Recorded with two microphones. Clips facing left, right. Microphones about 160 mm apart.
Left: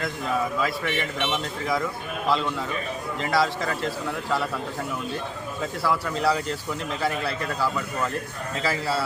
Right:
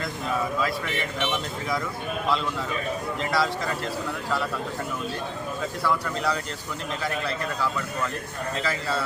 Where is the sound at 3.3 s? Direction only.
Centre (ahead or behind).